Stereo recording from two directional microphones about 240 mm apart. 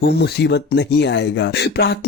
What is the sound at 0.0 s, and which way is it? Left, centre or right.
Speech, left.